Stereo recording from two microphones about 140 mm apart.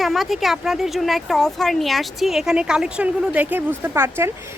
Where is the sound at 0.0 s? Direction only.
Centre (ahead or behind).